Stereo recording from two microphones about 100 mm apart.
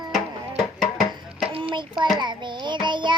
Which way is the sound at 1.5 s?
65° right (ahead or behind).